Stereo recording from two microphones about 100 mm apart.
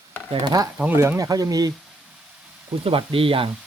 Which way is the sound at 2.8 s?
60° right (ahead or behind).